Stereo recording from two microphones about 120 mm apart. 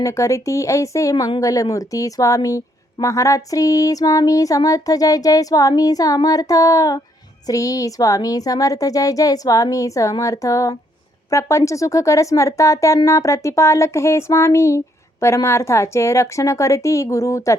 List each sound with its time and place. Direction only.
0.0 s speech: 25° left (ahead or behind)
1.1 s a woman's voice: 40° left (ahead or behind)
1.4 s speech: 30° left (ahead or behind)